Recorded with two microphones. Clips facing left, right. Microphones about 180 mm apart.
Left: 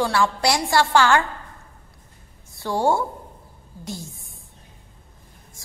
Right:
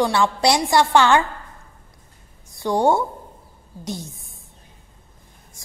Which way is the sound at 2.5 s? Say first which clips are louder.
Right 3 dB; 20° right (ahead or behind).